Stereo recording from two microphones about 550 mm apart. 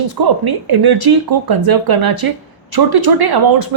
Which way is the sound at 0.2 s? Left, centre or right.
Right.